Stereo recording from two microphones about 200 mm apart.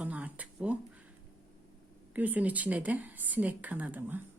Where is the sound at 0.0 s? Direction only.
5° right (ahead or behind).